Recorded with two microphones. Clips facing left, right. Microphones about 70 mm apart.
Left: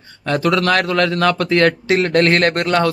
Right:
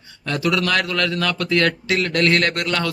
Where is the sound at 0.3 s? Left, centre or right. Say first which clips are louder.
Left 5 dB; left.